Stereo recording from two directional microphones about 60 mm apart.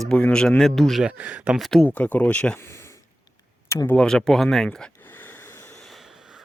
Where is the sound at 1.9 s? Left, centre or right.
Left.